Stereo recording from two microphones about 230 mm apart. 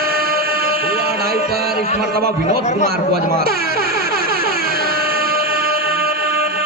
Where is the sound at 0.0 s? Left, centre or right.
Right.